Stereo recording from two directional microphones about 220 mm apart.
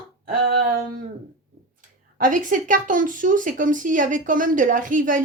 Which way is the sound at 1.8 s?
35° right (ahead or behind).